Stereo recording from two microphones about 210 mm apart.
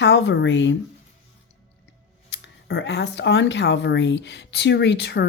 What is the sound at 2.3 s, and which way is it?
Speech, 60° left (ahead or behind).